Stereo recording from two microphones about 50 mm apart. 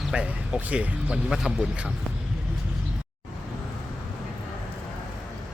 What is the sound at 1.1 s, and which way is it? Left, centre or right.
Speech, centre.